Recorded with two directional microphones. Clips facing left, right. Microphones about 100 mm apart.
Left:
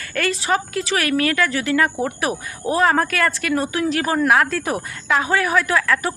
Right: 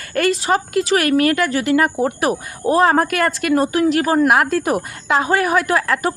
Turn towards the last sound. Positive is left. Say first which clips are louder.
# right 2 dB
turn(degrees=-35)  # may be behind; listen again after turning